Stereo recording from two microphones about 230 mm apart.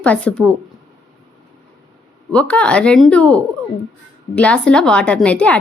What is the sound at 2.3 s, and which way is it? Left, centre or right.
Speech, centre.